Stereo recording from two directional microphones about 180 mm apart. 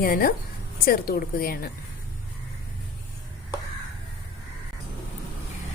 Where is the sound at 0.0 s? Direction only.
55° left (ahead or behind).